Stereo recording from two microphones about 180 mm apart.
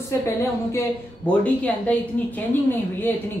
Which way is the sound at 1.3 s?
10° left (ahead or behind).